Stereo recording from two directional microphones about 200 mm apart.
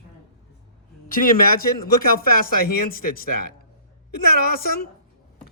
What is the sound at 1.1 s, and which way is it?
Speech, 45° left (ahead or behind).